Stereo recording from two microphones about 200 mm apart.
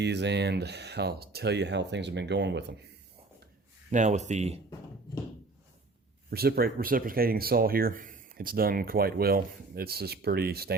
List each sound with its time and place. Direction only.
0.0 s speech: 60° right (ahead or behind)
3.9 s speech: 35° right (ahead or behind)
6.3 s speech: 50° right (ahead or behind)